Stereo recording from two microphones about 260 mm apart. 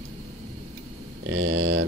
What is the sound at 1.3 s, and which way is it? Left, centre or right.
Speech, right.